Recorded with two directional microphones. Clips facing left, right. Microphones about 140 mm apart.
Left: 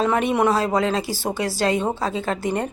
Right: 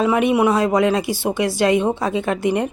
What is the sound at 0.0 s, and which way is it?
Speech, 10° right (ahead or behind).